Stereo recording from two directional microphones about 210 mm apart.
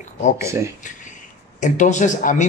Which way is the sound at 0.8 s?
35° left (ahead or behind).